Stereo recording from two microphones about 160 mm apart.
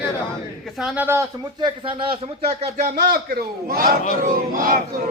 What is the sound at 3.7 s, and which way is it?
Battle cry, 65° right (ahead or behind).